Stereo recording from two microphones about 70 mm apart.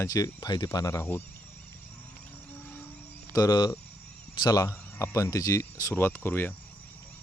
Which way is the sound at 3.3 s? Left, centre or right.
Left.